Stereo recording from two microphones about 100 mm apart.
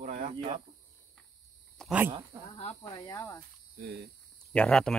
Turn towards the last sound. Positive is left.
turn(degrees=10)  # may be behind; listen again after turning